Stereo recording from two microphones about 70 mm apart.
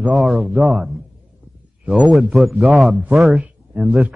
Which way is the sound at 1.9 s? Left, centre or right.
Centre.